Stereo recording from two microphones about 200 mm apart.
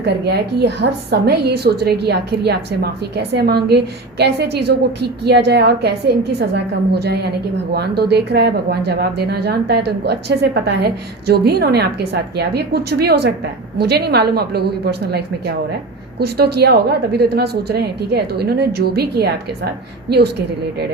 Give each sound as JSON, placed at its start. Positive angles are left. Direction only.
{"t": 0.0, "sound": "a woman's voice", "side_deg": -55}